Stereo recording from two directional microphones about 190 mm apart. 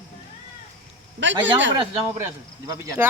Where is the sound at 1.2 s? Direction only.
75° right (ahead or behind).